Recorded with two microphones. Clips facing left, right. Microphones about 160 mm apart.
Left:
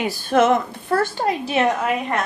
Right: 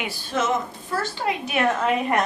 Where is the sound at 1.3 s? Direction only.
30° left (ahead or behind).